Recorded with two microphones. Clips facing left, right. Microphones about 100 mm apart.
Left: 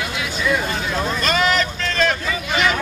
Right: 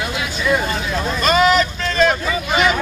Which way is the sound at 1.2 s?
15° right (ahead or behind).